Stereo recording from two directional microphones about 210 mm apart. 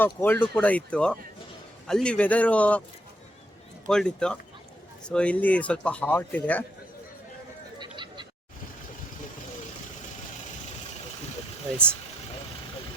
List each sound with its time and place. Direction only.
0.0 s speech: 10° left (ahead or behind)
3.8 s speech: 5° left (ahead or behind)
7.8 s a sound: 20° right (ahead or behind)